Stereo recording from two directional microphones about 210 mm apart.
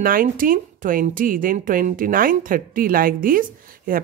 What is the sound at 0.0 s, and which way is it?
Speech, 40° right (ahead or behind).